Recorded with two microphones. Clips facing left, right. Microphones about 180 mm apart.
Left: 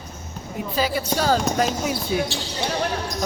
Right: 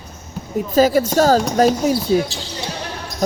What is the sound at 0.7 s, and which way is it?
Speech, 45° right (ahead or behind).